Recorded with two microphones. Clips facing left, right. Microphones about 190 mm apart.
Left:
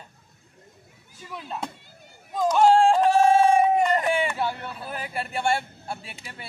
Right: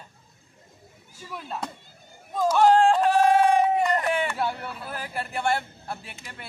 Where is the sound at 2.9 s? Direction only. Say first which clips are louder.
Left 1 dB; 25° left (ahead or behind).